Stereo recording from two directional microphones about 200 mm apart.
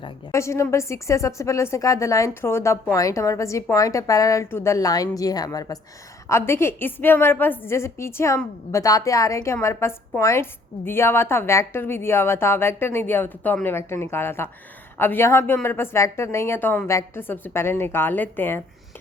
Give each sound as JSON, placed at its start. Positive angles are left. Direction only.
{"t": 0.3, "sound": "a woman's voice", "side_deg": 15}